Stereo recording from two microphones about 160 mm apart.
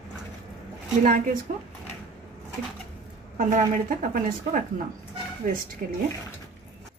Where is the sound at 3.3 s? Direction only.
50° right (ahead or behind).